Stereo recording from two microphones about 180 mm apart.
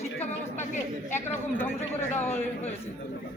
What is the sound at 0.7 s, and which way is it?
Speech, 40° left (ahead or behind).